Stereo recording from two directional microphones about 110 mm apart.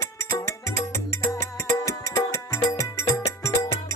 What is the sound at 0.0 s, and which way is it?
Music, 25° left (ahead or behind).